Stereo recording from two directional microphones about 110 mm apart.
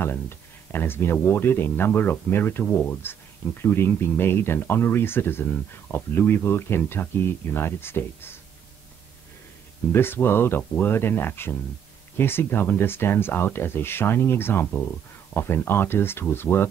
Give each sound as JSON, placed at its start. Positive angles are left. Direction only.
{"t": 0.7, "sound": "speech", "side_deg": 20}
{"t": 9.9, "sound": "speech", "side_deg": 20}